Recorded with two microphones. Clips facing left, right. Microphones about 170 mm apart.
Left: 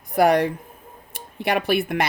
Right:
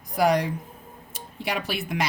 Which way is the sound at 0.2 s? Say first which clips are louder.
Left 4 dB; 60° left (ahead or behind).